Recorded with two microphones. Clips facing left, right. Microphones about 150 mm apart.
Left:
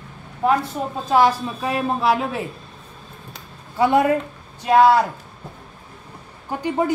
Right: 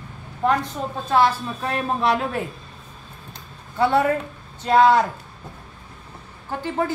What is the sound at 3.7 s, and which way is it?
A woman's voice, 15° left (ahead or behind).